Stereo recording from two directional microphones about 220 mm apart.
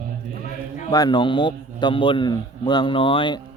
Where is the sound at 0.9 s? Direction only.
20° left (ahead or behind).